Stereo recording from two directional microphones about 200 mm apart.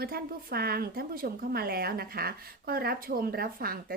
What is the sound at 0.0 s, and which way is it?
A woman's voice, 50° right (ahead or behind).